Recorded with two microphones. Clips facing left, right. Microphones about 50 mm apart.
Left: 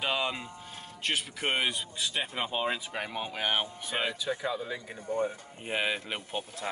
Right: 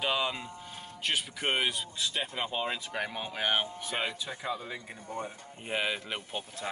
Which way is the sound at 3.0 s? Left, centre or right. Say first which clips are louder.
Even; centre.